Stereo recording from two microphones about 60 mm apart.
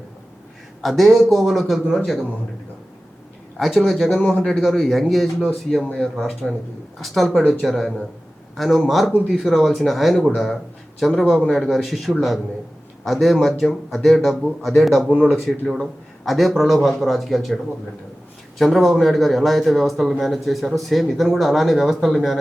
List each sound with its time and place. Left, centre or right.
0.8 s a man's voice: centre
3.6 s a man's voice: centre
5.9 s speech: centre
7.0 s a man's voice: centre
18.6 s a man's voice: centre